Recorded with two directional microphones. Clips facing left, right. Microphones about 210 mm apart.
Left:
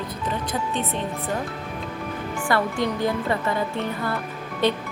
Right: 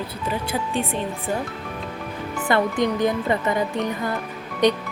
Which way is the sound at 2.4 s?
20° right (ahead or behind).